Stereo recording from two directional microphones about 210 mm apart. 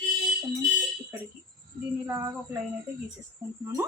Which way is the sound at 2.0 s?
10° right (ahead or behind).